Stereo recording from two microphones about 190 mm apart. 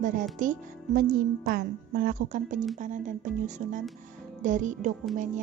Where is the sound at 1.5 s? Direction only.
50° right (ahead or behind).